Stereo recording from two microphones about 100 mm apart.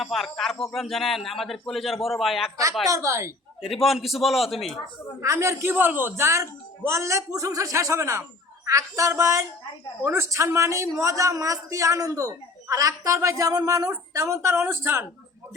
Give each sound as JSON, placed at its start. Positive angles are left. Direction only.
{"t": 0.0, "sound": "a man's voice", "side_deg": 0}
{"t": 2.9, "sound": "a man's voice", "side_deg": -30}
{"t": 3.6, "sound": "a man's voice", "side_deg": 0}
{"t": 5.2, "sound": "a woman's voice", "side_deg": -30}